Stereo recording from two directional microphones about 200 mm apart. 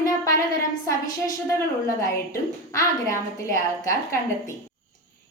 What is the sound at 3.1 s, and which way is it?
A woman's voice, 15° left (ahead or behind).